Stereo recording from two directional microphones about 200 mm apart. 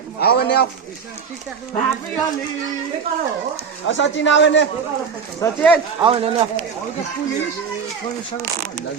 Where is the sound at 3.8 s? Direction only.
65° left (ahead or behind).